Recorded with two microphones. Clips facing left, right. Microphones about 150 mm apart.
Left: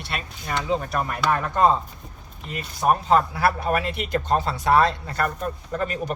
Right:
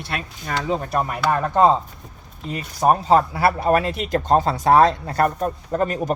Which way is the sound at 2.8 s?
35° right (ahead or behind).